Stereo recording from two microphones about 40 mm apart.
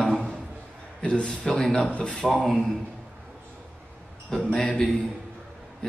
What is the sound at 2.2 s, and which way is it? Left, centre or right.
Speech, centre.